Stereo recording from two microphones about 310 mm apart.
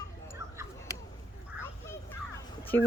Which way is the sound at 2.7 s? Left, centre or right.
Centre.